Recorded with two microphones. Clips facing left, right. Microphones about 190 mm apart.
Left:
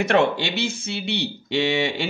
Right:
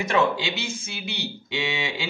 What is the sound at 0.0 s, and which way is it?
Speech, 65° left (ahead or behind).